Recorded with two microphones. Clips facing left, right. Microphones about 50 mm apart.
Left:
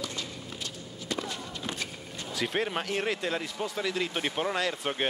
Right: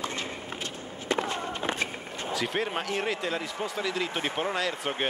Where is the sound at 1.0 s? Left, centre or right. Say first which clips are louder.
Right 6 dB; right.